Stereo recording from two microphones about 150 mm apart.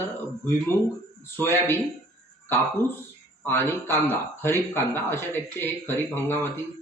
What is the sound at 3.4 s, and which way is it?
Speech, 15° left (ahead or behind).